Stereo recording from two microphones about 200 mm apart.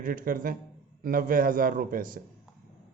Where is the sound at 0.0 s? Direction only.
45° right (ahead or behind).